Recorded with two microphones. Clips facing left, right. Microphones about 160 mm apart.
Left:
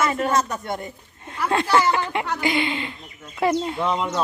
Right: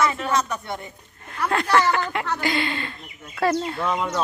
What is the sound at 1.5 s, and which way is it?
Speech, 25° left (ahead or behind).